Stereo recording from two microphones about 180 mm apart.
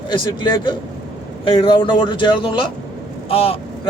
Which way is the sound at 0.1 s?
25° left (ahead or behind).